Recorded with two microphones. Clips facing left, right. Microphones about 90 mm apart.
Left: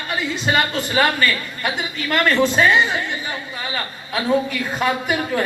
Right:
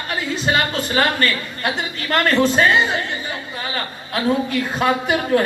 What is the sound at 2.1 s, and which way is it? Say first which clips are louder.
Speech: right 1 dB; 40° right (ahead or behind).